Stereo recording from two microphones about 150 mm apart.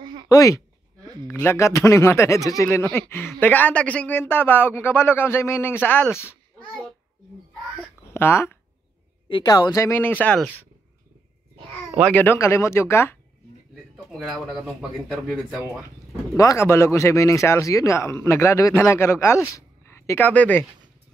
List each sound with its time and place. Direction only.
0.0 s a sound: 30° right (ahead or behind)
0.3 s speech: 20° left (ahead or behind)
8.1 s speech: 15° left (ahead or behind)
9.3 s speech: 30° left (ahead or behind); by 10.4 s 10° left (ahead or behind)
12.0 s speech: 10° left (ahead or behind)
14.1 s speech: centre (ahead or behind)
16.3 s speech: 20° left (ahead or behind)